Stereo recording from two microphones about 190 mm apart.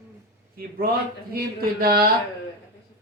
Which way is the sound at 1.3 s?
50° right (ahead or behind).